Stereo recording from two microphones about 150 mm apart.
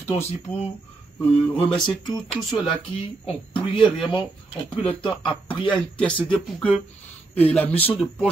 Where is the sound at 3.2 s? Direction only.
35° left (ahead or behind).